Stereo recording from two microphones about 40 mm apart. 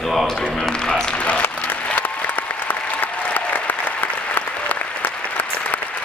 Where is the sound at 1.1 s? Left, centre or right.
Left.